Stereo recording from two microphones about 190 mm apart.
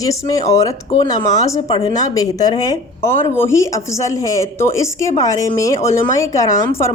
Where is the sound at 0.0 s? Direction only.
20° left (ahead or behind).